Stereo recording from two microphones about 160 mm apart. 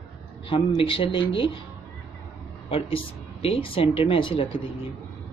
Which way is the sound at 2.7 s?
35° left (ahead or behind).